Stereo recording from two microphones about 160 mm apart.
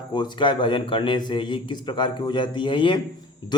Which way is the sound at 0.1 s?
30° left (ahead or behind).